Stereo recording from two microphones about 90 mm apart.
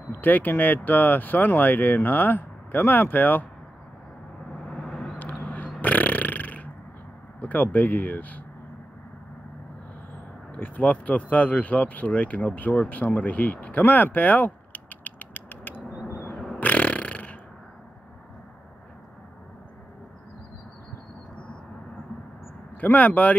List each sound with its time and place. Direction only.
0.1 s speech: 20° left (ahead or behind)
4.6 s vehicle: 5° left (ahead or behind)
5.3 s a sound: 15° left (ahead or behind)
7.3 s speech: 20° left (ahead or behind)
10.5 s speech: 15° left (ahead or behind)
16.5 s a sound: 15° left (ahead or behind)
22.8 s speech: 15° left (ahead or behind)